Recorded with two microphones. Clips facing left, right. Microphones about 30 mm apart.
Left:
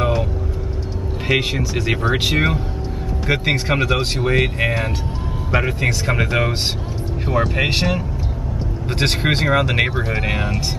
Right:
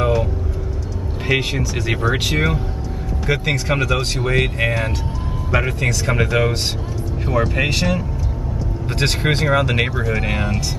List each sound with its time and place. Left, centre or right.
0.0 s vehicle: centre
1.2 s speech: centre
9.9 s speech: left
10.2 s speech: centre